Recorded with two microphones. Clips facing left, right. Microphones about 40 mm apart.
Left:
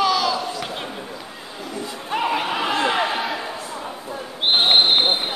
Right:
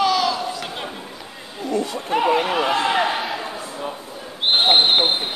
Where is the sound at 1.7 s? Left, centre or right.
Right.